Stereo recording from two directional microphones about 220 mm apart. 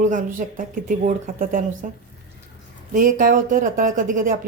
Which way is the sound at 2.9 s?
35° right (ahead or behind).